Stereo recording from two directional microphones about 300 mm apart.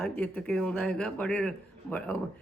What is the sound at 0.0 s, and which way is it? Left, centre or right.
Speech, centre.